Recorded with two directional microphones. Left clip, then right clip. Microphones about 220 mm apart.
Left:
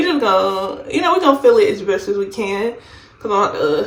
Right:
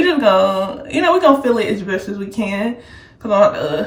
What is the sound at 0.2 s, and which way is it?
Speech, 20° left (ahead or behind).